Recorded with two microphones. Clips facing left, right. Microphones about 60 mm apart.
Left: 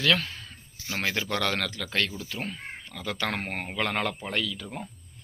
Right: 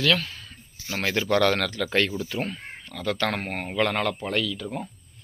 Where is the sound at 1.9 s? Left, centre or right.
Centre.